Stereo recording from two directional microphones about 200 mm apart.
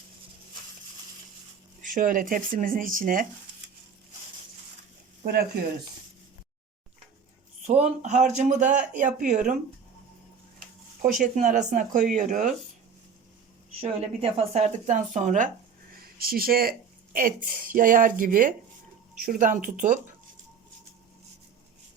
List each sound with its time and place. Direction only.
1.8 s speech: 40° right (ahead or behind)
5.2 s speech: 50° right (ahead or behind)
7.7 s speech: 35° right (ahead or behind)
11.0 s speech: 40° right (ahead or behind)
13.8 s speech: 30° right (ahead or behind)
16.0 s speech: 50° right (ahead or behind)